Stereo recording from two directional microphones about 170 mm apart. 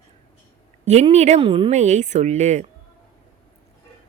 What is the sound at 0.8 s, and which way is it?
Speech, 40° right (ahead or behind).